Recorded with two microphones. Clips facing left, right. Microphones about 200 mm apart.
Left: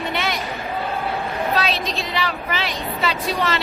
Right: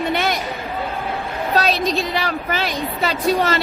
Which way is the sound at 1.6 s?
40° right (ahead or behind).